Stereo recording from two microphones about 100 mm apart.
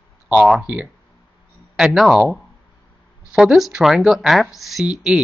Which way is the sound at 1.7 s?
5° right (ahead or behind).